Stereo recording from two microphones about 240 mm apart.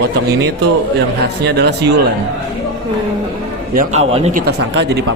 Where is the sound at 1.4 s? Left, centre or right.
Right.